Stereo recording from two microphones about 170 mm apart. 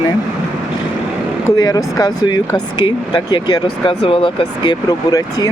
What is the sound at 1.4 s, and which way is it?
Speech, 20° left (ahead or behind).